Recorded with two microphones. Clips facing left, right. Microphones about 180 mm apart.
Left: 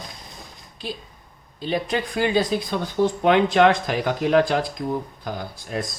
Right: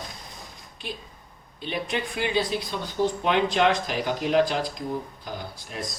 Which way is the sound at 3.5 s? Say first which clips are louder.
Left 5 dB; 60° left (ahead or behind).